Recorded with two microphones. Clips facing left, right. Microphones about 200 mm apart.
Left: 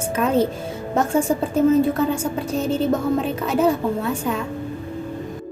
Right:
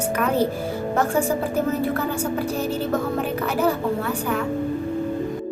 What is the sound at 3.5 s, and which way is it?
Speech, 25° left (ahead or behind).